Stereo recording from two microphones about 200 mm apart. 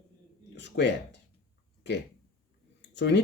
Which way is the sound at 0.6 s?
60° left (ahead or behind).